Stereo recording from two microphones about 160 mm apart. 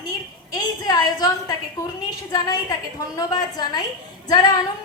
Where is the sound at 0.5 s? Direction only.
25° left (ahead or behind).